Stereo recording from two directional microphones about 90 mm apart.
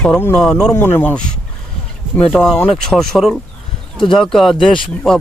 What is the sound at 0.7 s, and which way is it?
Speech, 25° left (ahead or behind).